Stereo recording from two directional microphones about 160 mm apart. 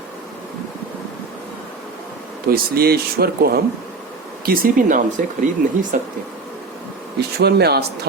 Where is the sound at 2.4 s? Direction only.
70° right (ahead or behind).